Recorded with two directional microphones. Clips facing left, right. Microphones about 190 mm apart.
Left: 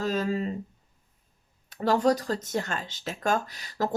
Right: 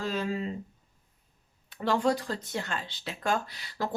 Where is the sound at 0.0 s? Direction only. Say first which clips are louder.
Left 4 dB; 40° left (ahead or behind).